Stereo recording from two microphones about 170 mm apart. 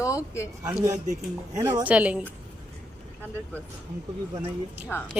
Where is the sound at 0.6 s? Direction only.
15° right (ahead or behind).